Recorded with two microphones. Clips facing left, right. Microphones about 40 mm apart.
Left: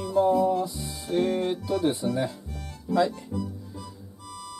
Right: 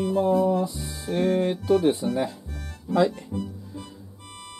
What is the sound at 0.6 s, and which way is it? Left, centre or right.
Music, centre.